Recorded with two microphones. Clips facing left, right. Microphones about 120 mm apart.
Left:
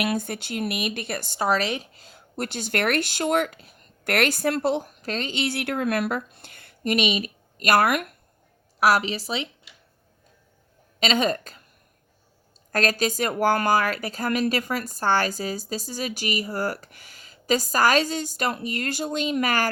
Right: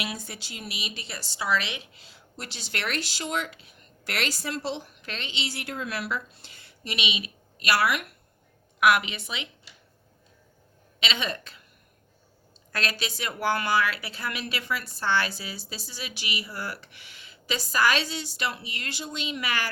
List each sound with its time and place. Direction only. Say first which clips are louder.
0.0 s a woman's voice: left 9 dB; 55° left (ahead or behind)
8.8 s a woman's voice: left 2 dB; 35° left (ahead or behind)
11.0 s a woman's voice: left 8 dB; 45° left (ahead or behind)
12.7 s a woman's voice: left 8 dB; 45° left (ahead or behind)